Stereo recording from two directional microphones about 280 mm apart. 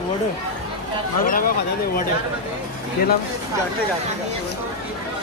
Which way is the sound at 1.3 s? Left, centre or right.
Left.